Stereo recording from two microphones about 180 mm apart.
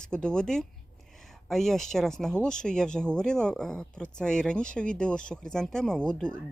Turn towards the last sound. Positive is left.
turn(degrees=5)  # may be behind; listen again after turning